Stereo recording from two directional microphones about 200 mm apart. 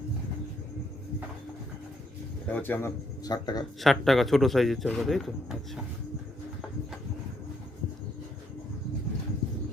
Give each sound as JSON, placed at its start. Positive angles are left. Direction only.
{"t": 2.5, "sound": "speech", "side_deg": 10}
{"t": 3.8, "sound": "speech", "side_deg": 0}